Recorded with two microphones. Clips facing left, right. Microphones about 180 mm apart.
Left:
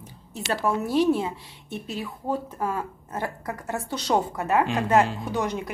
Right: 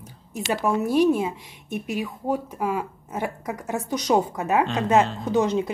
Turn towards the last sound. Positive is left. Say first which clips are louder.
# right 6 dB
turn(degrees=-20)  # may be behind; listen again after turning